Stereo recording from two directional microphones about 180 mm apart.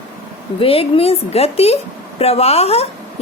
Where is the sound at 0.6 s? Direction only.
30° left (ahead or behind).